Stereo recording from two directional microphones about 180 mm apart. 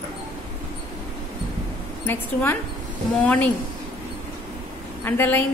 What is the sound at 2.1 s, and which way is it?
A woman's voice, 10° left (ahead or behind).